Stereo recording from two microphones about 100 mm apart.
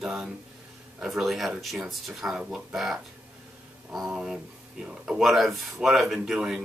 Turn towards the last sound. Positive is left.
turn(degrees=-5)  # may be behind; listen again after turning